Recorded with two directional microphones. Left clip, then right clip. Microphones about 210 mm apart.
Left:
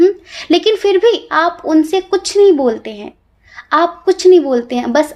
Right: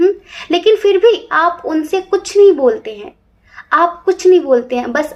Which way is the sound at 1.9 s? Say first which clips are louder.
Left 1 dB; 40° left (ahead or behind).